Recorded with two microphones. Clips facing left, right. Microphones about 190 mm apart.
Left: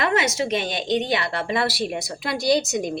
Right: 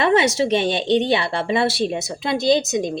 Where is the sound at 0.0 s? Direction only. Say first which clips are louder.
Right 5 dB; 30° right (ahead or behind).